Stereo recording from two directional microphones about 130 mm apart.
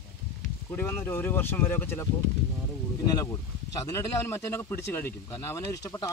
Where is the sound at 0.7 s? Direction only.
15° left (ahead or behind).